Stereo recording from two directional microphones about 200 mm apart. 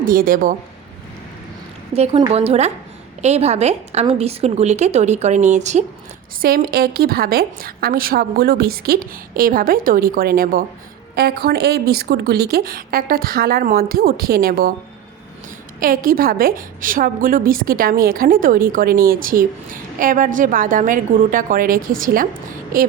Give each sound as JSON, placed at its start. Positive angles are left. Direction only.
{"t": 0.0, "sound": "a woman's voice", "side_deg": -45}
{"t": 2.0, "sound": "a woman's voice", "side_deg": -25}
{"t": 6.4, "sound": "a woman's voice", "side_deg": -50}
{"t": 15.8, "sound": "a woman's voice", "side_deg": -45}